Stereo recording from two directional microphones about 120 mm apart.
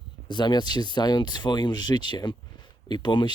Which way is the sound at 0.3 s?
40° left (ahead or behind).